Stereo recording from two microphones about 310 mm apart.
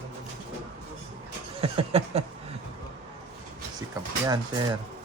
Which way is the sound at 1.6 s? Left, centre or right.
Centre.